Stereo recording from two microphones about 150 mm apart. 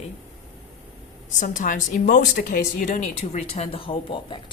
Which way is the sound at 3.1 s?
45° left (ahead or behind).